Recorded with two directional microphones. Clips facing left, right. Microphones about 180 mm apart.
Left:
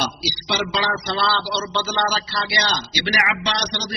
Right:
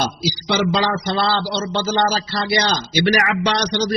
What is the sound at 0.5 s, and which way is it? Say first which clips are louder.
A man's voice: right 5 dB; 45° right (ahead or behind).